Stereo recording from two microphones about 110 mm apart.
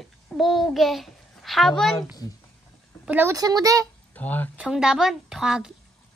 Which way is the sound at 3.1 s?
20° right (ahead or behind).